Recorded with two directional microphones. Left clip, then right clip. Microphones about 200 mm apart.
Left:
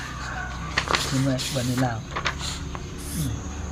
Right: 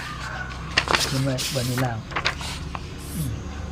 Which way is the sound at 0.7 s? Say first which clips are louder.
Right 3 dB; 40° right (ahead or behind).